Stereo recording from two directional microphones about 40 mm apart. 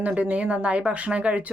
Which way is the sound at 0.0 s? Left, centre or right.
Right.